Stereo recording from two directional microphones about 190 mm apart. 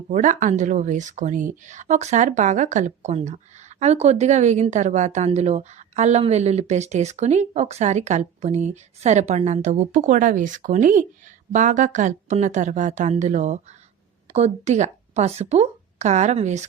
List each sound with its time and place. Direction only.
0.1 s speech: 40° right (ahead or behind)